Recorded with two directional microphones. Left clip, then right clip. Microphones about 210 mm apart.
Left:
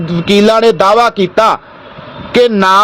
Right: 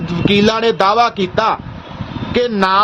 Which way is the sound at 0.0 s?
20° left (ahead or behind).